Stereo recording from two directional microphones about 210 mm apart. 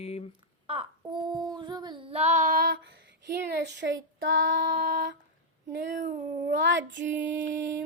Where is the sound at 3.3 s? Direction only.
55° right (ahead or behind).